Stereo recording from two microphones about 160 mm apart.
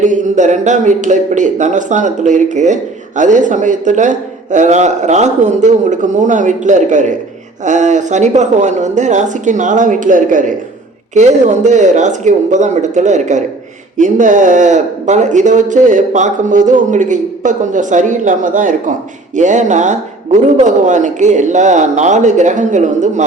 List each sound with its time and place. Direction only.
0.0 s speech: 50° right (ahead or behind)